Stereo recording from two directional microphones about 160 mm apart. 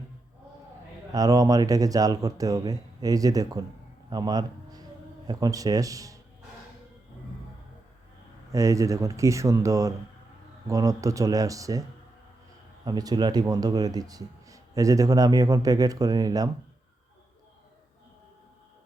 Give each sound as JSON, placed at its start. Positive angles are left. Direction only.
{"t": 1.1, "sound": "a man's voice", "side_deg": -20}
{"t": 8.5, "sound": "speech", "side_deg": -20}